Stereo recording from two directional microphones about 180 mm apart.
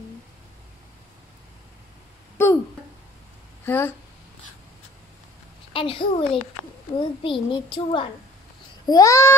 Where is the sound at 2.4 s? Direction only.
10° left (ahead or behind).